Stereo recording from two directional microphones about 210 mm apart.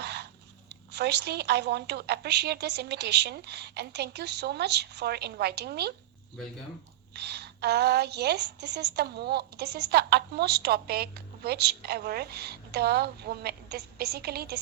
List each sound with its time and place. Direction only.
0.0 s a sound: 55° right (ahead or behind)
0.7 s a woman's voice: 55° right (ahead or behind)
7.1 s a woman's voice: 50° right (ahead or behind)